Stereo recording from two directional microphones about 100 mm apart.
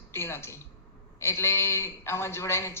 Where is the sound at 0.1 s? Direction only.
25° left (ahead or behind).